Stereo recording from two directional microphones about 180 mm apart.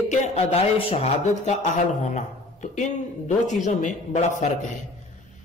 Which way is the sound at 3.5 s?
40° left (ahead or behind).